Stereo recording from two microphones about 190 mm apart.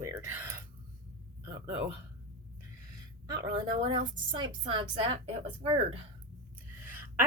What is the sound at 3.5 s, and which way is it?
A woman's voice, 25° right (ahead or behind).